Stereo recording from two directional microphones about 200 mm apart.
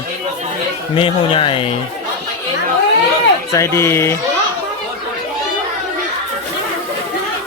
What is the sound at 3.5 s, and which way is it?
Speech, 15° left (ahead or behind).